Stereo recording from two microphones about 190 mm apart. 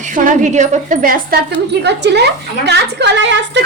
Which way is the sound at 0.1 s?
45° right (ahead or behind).